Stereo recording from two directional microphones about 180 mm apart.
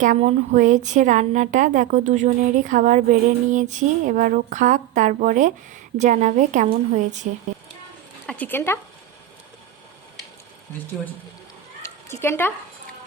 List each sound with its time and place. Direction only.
0.0 s a woman's voice: 40° right (ahead or behind)
8.3 s speech: 10° left (ahead or behind)
11.8 s cat: 15° left (ahead or behind)